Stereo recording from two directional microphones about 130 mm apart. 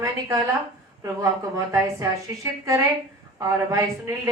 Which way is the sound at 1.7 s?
25° right (ahead or behind).